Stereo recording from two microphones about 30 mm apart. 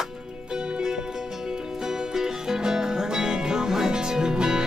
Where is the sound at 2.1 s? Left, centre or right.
Centre.